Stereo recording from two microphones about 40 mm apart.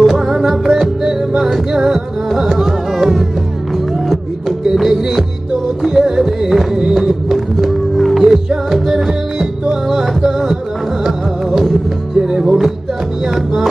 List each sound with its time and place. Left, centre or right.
0.1 s music: centre
4.5 s music: centre
7.0 s a sound: centre
7.6 s music: centre
8.2 s music: centre
12.2 s music: centre
12.4 s music: centre